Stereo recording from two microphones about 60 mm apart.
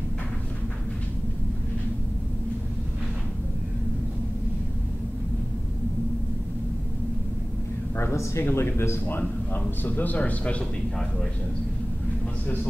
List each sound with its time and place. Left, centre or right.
8.0 s speech: left
9.8 s speech: left